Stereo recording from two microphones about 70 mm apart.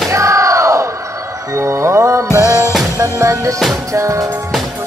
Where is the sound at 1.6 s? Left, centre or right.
Right.